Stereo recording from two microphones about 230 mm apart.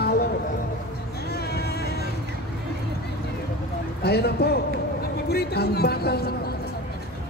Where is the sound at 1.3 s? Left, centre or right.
Left.